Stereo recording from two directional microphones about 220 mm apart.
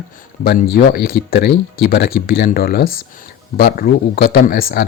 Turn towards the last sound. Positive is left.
turn(degrees=40)  # may be behind; listen again after turning